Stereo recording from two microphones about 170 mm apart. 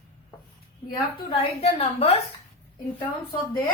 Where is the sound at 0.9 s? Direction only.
30° left (ahead or behind).